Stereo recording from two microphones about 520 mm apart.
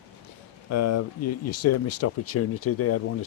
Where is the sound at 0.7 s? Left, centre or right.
Left.